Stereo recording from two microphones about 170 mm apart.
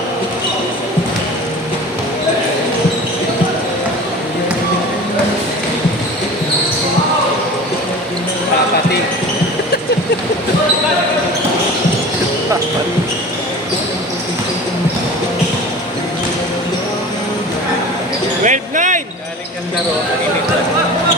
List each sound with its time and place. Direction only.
18.4 s basketball bounce: 50° right (ahead or behind)